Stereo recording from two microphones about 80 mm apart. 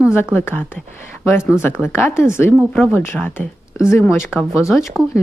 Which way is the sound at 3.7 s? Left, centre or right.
Left.